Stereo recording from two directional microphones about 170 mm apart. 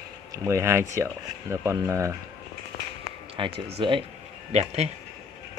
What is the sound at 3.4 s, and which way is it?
Speech, 30° right (ahead or behind).